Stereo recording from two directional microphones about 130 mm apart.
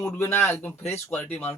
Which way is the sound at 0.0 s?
15° left (ahead or behind).